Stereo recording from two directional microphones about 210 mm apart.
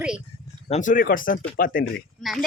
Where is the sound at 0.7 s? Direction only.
35° left (ahead or behind).